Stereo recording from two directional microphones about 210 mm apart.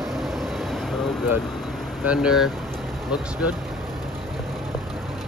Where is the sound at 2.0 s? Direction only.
5° right (ahead or behind).